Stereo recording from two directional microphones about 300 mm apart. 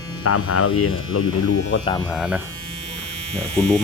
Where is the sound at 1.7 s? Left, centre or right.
Left.